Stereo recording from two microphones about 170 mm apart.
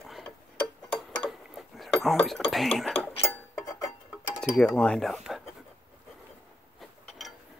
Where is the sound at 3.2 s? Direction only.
15° left (ahead or behind).